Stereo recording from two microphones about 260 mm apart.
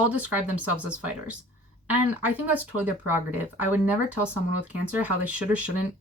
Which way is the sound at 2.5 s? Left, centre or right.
Centre.